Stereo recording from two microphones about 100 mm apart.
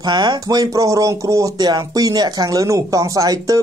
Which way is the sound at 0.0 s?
45° right (ahead or behind).